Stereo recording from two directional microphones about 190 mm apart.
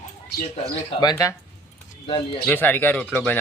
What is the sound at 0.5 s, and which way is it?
Speech, 20° left (ahead or behind).